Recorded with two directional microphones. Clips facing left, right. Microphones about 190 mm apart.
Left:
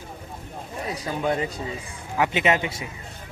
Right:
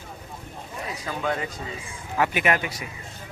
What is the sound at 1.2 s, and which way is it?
Speech, 20° left (ahead or behind).